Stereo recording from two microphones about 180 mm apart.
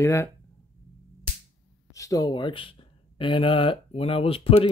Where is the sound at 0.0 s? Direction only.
15° left (ahead or behind).